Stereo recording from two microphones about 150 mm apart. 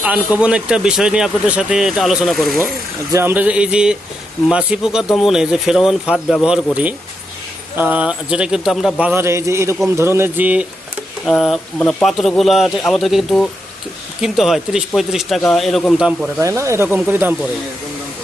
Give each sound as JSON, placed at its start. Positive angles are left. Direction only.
{"t": 0.3, "sound": "speech", "side_deg": -5}
{"t": 3.1, "sound": "speech", "side_deg": -15}
{"t": 7.8, "sound": "speech", "side_deg": -10}
{"t": 16.4, "sound": "speech", "side_deg": -20}